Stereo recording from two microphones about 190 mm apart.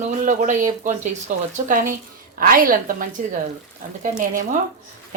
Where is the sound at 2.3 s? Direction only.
50° right (ahead or behind).